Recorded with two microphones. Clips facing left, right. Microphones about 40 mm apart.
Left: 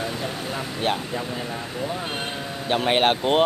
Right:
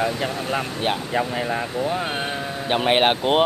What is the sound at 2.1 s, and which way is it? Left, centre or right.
Speech, centre.